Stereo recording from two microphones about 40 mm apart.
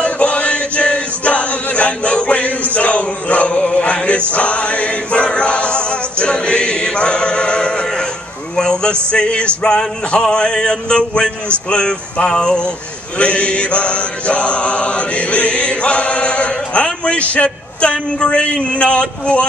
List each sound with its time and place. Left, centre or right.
0.0 s chant: left
4.3 s choir: left
8.5 s speech: centre
9.1 s mantra: left